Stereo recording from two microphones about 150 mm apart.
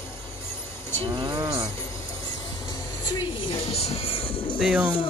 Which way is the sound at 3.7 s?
40° left (ahead or behind).